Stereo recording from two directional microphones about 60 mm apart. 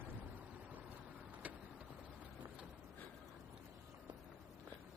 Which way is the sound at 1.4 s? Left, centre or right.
Right.